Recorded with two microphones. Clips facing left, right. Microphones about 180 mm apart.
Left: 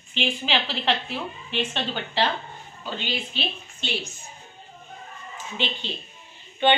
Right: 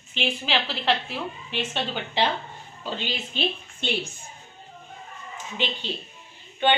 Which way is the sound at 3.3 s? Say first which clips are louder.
Right 4 dB; 55° right (ahead or behind).